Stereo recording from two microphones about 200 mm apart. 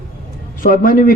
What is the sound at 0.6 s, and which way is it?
Speech, 45° left (ahead or behind).